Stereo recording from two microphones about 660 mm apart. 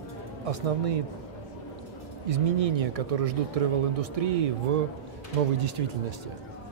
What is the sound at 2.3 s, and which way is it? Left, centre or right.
Speech, right.